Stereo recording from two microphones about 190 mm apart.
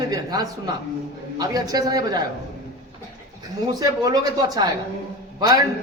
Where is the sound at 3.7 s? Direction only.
20° right (ahead or behind).